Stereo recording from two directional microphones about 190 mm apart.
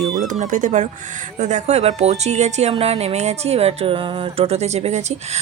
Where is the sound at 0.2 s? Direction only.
40° right (ahead or behind).